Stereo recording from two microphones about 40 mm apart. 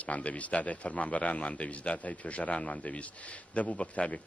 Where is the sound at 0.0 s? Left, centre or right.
Left.